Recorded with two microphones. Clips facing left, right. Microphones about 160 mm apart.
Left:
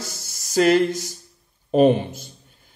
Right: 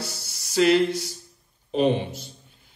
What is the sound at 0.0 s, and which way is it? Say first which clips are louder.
Music: right 1 dB; 45° left (ahead or behind).